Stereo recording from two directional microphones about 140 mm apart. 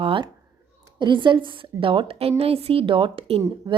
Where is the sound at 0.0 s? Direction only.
40° right (ahead or behind).